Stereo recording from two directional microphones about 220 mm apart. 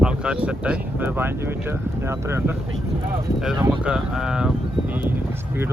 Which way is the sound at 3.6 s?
5° right (ahead or behind).